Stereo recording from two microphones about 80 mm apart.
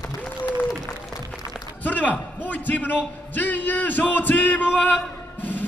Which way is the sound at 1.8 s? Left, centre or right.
Left.